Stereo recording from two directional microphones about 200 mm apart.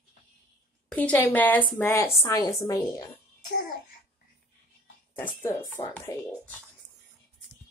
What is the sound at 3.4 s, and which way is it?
Speech, 45° left (ahead or behind).